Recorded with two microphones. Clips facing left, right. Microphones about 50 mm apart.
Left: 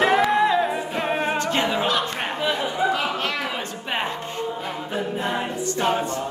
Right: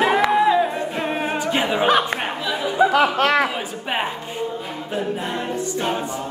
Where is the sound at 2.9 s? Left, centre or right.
Right.